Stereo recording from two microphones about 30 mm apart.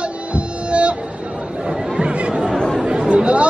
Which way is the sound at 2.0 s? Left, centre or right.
Right.